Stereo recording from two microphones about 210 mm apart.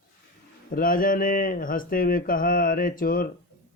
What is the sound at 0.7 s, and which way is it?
Speech, 40° left (ahead or behind).